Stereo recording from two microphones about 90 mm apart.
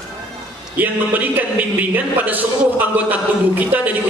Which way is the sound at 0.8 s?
20° right (ahead or behind).